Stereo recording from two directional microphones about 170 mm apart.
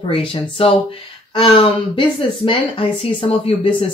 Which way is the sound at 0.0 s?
30° left (ahead or behind).